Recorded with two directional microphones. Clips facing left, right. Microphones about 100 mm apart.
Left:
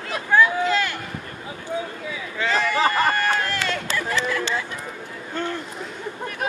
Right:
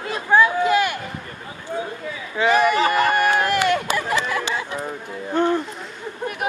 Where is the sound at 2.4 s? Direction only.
15° right (ahead or behind).